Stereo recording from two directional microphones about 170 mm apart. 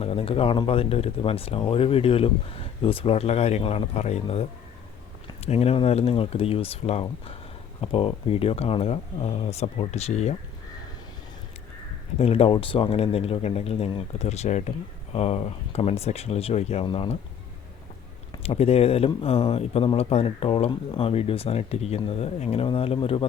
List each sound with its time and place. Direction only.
0.0 s speech: 35° left (ahead or behind)
5.5 s speech: 35° left (ahead or behind)
12.2 s speech: 35° left (ahead or behind)
18.4 s speech: 35° left (ahead or behind)